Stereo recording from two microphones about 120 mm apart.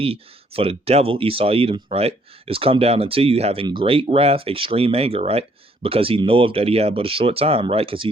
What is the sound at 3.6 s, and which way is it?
Speech, 45° right (ahead or behind).